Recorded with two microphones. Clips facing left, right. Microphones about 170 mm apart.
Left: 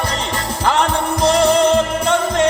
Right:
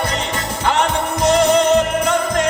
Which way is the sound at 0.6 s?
35° left (ahead or behind).